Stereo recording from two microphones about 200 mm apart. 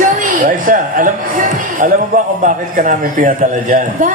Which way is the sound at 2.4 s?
40° right (ahead or behind).